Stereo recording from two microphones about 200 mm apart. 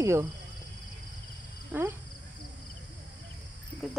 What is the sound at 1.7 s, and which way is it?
Speech, 10° right (ahead or behind).